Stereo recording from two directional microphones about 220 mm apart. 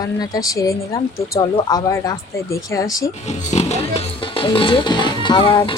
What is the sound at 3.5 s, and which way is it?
Speech, 30° left (ahead or behind).